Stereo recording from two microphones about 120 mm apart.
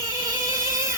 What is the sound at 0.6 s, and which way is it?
Music, 25° right (ahead or behind).